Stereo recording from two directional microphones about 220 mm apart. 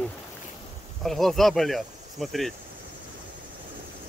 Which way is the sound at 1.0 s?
Centre (ahead or behind).